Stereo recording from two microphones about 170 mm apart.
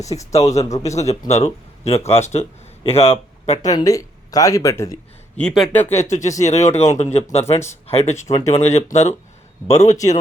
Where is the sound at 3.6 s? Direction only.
20° left (ahead or behind).